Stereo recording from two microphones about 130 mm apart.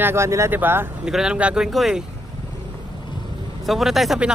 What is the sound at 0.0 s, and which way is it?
Speech, 20° right (ahead or behind).